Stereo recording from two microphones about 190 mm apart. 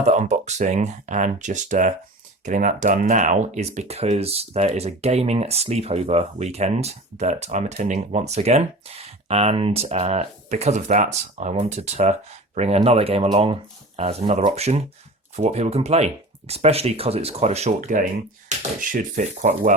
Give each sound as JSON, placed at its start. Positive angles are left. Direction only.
{"t": 0.0, "sound": "speech", "side_deg": -35}